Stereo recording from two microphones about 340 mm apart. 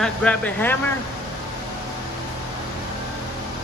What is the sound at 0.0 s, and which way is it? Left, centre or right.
Speech, centre.